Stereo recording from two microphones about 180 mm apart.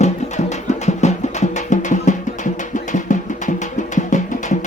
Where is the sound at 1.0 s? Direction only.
40° left (ahead or behind).